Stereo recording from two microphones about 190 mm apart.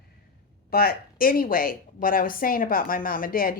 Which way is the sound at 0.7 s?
55° left (ahead or behind).